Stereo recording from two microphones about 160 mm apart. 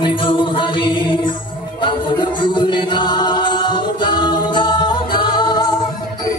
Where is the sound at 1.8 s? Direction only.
30° left (ahead or behind).